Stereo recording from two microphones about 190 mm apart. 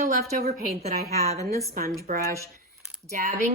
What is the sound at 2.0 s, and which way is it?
Speech, 50° right (ahead or behind).